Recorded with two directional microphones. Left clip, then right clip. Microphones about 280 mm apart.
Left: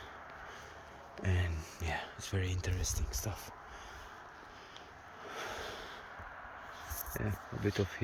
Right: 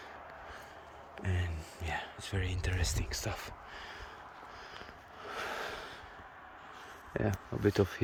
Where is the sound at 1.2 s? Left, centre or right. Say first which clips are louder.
Left 2 dB; centre.